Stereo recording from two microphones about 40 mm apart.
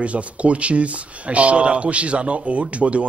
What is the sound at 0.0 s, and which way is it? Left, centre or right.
A man's voice, right.